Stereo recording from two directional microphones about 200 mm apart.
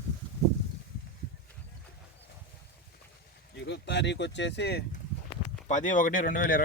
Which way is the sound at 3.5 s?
60° left (ahead or behind).